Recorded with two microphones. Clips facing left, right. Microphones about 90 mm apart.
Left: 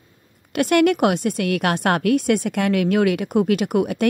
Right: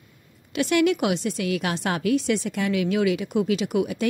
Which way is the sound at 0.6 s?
55° left (ahead or behind).